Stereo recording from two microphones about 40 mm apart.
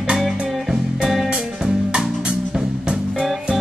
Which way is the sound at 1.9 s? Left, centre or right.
Centre.